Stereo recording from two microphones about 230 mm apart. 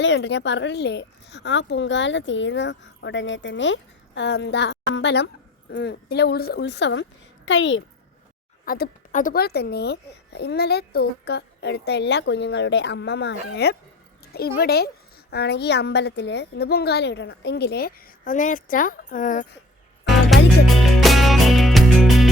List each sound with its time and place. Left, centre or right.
0.0 s a woman's voice: left
8.6 s speech: left
20.1 s music: centre